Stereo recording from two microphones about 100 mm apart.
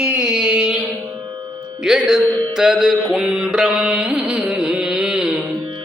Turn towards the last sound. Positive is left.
turn(degrees=-5)  # may be behind; listen again after turning